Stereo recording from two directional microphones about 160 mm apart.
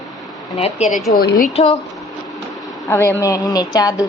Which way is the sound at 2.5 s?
Centre (ahead or behind).